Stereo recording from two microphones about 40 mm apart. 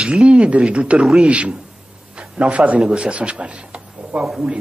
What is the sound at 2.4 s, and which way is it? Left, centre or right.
Speech, right.